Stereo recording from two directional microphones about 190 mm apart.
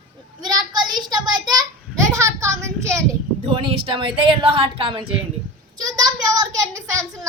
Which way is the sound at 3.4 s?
25° right (ahead or behind).